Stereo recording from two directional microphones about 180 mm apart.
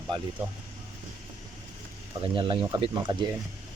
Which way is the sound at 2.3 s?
30° right (ahead or behind).